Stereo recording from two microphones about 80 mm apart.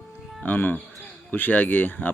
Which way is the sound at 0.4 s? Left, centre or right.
Left.